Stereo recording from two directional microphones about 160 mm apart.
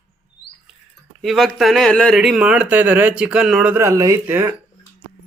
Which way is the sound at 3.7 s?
20° right (ahead or behind).